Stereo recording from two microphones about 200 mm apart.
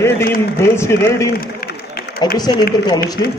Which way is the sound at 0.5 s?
15° left (ahead or behind).